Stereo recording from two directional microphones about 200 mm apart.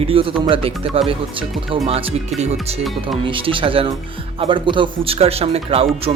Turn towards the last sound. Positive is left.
turn(degrees=-30)  # may be behind; listen again after turning